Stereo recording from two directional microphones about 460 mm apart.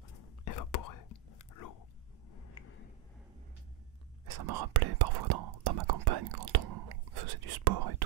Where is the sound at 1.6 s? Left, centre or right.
Left.